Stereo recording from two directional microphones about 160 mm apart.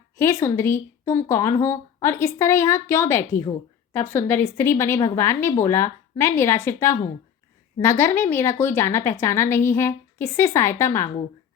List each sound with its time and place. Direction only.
0.2 s a woman's voice: 15° left (ahead or behind)